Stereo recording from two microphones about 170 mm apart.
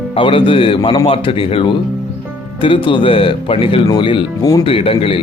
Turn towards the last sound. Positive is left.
turn(degrees=35)  # may be behind; listen again after turning